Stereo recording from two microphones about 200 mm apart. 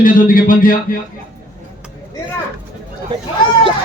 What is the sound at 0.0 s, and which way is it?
Speech, 45° left (ahead or behind).